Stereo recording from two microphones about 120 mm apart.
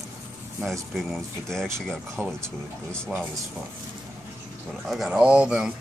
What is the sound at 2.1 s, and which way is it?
Speech, 20° right (ahead or behind).